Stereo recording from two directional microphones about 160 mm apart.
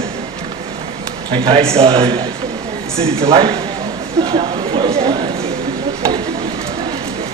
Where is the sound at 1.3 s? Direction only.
35° right (ahead or behind).